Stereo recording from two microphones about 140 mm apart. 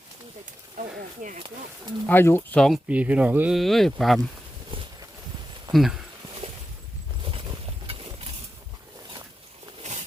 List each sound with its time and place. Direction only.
0.8 s speech: 65° right (ahead or behind)
1.4 s speech: 35° right (ahead or behind)
2.0 s speech: 15° left (ahead or behind)
2.6 s speech: 5° left (ahead or behind)
2.9 s speech: 10° right (ahead or behind)
3.6 s speech: centre (ahead or behind)
4.7 s walk: 40° right (ahead or behind)
5.7 s speech: centre (ahead or behind)
7.9 s a sound: 45° right (ahead or behind)
9.8 s a sound: 55° right (ahead or behind)